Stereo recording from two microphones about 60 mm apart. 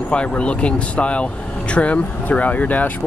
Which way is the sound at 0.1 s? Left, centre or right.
Centre.